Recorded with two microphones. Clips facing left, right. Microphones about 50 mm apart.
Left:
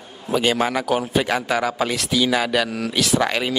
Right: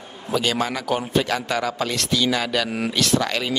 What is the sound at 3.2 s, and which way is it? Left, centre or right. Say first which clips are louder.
Speech: left 3 dB; centre.